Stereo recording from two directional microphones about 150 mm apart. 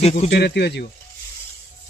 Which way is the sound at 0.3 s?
90° left.